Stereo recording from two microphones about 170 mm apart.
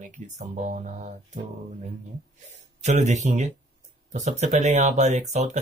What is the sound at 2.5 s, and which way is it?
Speech, 40° right (ahead or behind).